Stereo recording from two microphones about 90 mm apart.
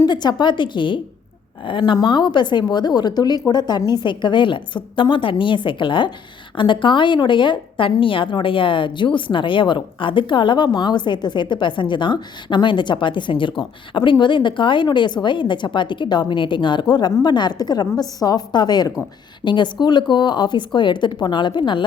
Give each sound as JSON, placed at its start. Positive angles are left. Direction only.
{"t": 0.0, "sound": "a woman's voice", "side_deg": 50}
{"t": 19.5, "sound": "a woman's voice", "side_deg": 60}